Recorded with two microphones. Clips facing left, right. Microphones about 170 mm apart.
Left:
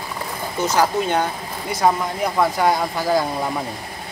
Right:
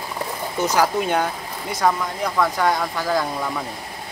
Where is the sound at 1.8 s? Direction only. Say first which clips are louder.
Left 2 dB; 20° left (ahead or behind).